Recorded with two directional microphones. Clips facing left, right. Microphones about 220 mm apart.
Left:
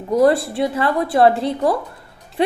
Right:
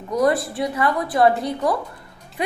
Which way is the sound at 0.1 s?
30° left (ahead or behind).